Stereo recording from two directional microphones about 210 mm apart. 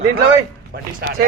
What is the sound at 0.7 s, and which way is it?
Speech, 45° right (ahead or behind).